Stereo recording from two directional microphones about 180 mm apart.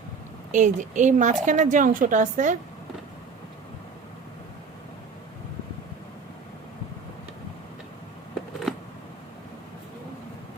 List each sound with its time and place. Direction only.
0.5 s a woman's voice: 45° right (ahead or behind)